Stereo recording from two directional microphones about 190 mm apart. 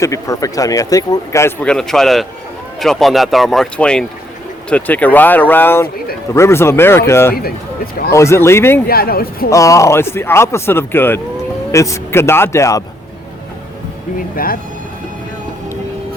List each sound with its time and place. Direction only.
0.0 s speech: 15° left (ahead or behind)
8.9 s speech: 50° left (ahead or behind)
9.5 s speech: 15° left (ahead or behind)
14.3 s speech: 50° left (ahead or behind)